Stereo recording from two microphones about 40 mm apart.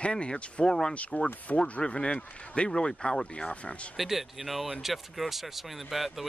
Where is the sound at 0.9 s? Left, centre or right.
Left.